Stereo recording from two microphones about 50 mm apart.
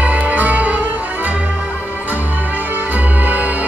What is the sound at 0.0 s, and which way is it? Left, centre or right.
Music, right.